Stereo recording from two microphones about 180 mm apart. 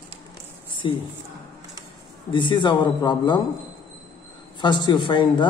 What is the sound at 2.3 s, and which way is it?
A man's voice, 25° left (ahead or behind).